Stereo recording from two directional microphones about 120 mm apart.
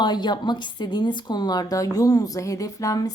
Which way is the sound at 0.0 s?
35° left (ahead or behind).